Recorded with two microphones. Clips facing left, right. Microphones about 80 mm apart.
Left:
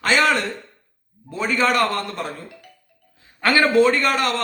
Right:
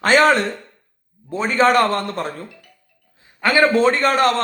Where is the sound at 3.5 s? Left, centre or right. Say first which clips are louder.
Right 1 dB; right.